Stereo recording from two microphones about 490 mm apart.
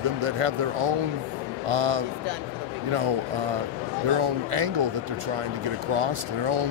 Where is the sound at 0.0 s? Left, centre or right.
Right.